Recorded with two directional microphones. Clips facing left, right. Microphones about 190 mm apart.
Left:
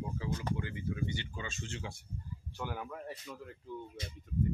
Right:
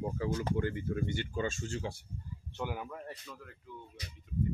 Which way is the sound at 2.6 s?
5° right (ahead or behind).